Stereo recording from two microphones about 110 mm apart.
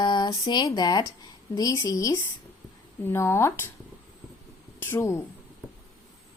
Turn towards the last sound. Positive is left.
turn(degrees=20)  # may be behind; listen again after turning